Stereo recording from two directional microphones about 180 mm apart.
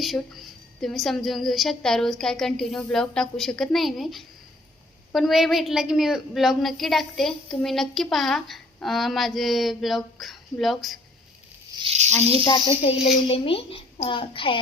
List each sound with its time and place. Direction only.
0.0 s a woman's voice: centre (ahead or behind)
11.8 s snake: 35° right (ahead or behind)
12.5 s a child's voice: 25° left (ahead or behind)